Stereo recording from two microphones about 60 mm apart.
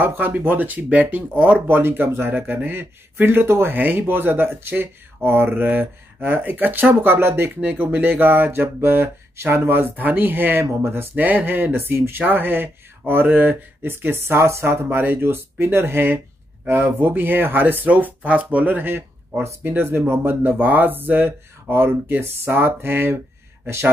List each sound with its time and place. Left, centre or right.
0.0 s speech: right
7.6 s speech: right
17.8 s speech: right